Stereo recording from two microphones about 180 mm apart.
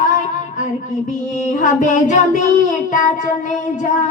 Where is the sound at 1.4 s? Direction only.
45° left (ahead or behind).